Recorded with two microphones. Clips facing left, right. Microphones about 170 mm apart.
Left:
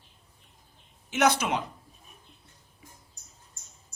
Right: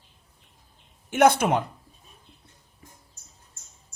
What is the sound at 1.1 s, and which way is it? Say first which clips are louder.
Speech: right 6 dB; 55° right (ahead or behind).